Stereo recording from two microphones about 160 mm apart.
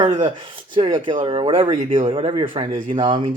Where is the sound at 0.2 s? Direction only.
30° right (ahead or behind).